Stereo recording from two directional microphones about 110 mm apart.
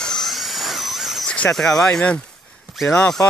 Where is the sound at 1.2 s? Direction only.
10° left (ahead or behind).